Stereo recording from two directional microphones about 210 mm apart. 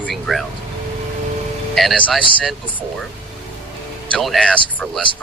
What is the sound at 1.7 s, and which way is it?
Speech, centre (ahead or behind).